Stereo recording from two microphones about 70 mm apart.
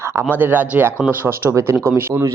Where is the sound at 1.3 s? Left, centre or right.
Right.